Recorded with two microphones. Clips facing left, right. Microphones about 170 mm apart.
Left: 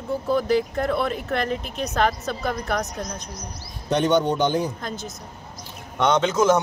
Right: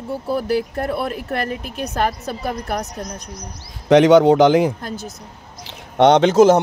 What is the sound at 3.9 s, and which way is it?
A man's voice, 90° right.